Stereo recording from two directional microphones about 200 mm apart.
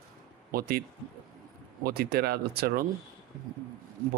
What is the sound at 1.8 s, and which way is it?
Speech, 50° right (ahead or behind).